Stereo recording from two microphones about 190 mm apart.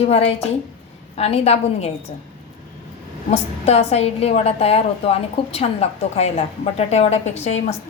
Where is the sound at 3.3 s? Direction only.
35° left (ahead or behind).